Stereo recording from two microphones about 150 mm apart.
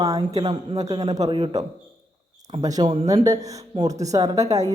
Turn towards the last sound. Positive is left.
turn(degrees=-20)  # may be behind; listen again after turning